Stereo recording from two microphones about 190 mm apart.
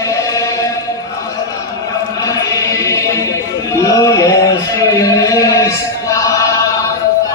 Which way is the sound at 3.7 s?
15° left (ahead or behind).